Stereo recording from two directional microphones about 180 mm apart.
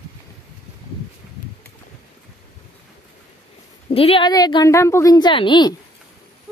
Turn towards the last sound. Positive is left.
turn(degrees=25)  # may be behind; listen again after turning